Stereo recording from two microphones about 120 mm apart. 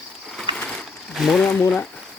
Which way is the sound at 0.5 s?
10° left (ahead or behind).